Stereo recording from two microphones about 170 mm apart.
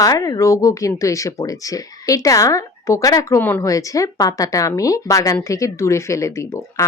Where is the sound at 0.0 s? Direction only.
20° left (ahead or behind).